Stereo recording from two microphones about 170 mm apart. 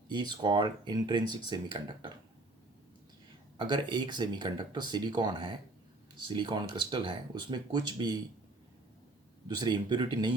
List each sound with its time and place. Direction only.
0.1 s speech: 25° right (ahead or behind)
3.6 s speech: 25° right (ahead or behind)
9.5 s speech: 25° right (ahead or behind)